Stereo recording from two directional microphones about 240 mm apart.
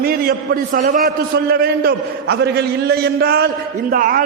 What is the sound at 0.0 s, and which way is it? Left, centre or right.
A man's voice, right.